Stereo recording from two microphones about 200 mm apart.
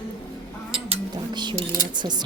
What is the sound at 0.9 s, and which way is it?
Speech, 25° right (ahead or behind).